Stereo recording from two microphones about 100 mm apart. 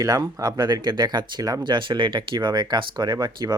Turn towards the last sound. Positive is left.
turn(degrees=-45)  # may be behind; listen again after turning